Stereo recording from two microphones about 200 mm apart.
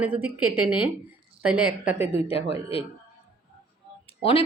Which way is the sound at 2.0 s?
30° left (ahead or behind).